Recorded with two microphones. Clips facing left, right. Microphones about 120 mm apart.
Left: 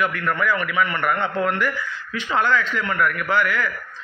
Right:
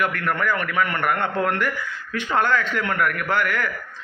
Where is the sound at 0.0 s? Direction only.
55° right (ahead or behind).